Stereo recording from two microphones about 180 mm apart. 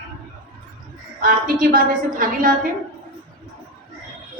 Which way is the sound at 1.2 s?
50° right (ahead or behind).